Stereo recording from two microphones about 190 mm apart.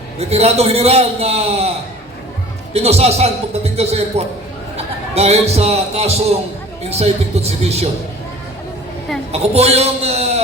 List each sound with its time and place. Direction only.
0.2 s a man's voice: 35° right (ahead or behind)
2.7 s a man's voice: 35° right (ahead or behind)
9.3 s a man's voice: 35° right (ahead or behind)